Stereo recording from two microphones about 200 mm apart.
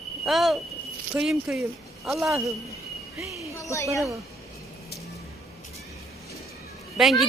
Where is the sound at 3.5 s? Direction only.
15° left (ahead or behind).